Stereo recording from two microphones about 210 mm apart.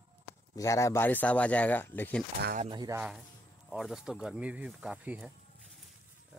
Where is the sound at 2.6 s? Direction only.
20° right (ahead or behind).